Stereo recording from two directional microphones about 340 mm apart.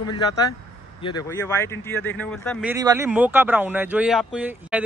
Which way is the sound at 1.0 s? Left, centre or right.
Centre.